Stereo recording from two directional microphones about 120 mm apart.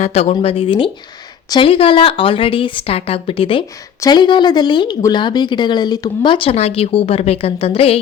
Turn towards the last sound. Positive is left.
turn(degrees=55)  # may be behind; listen again after turning